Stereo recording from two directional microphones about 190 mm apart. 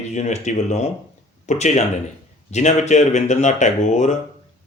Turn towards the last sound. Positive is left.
turn(degrees=40)  # may be behind; listen again after turning